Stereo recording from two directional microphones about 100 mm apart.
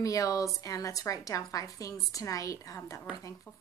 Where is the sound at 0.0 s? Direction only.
35° left (ahead or behind).